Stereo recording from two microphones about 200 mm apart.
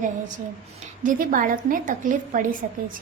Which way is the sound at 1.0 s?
45° right (ahead or behind).